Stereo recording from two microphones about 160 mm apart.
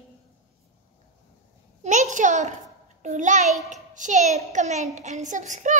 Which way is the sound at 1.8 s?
45° right (ahead or behind).